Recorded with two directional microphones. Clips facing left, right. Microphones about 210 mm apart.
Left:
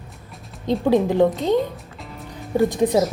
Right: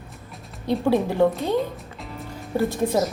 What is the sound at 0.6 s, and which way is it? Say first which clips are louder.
Speech: left 3 dB; 15° left (ahead or behind).